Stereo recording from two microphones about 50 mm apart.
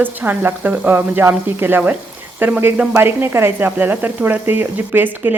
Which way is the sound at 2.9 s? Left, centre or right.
Right.